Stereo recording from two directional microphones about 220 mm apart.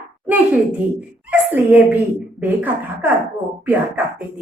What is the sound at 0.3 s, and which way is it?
A woman's voice, 5° right (ahead or behind).